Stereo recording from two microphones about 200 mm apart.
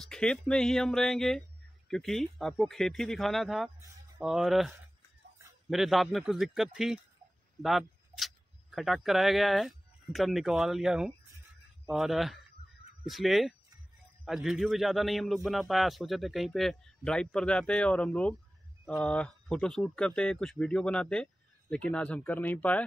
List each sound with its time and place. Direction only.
0.1 s speech: 5° left (ahead or behind)